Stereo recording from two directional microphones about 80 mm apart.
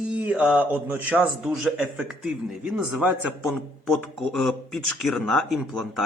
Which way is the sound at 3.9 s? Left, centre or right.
Centre.